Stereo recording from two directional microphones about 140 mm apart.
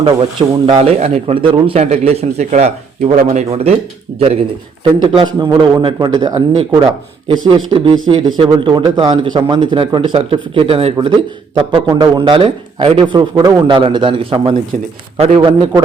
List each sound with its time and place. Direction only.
0.0 s a man's voice: 35° right (ahead or behind)